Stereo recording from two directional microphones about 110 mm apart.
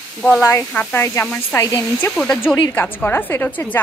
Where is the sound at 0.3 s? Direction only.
20° left (ahead or behind).